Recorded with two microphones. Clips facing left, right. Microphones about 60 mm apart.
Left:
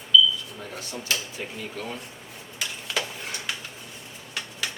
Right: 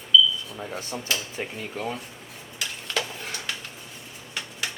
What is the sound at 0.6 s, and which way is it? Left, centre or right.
Speech, right.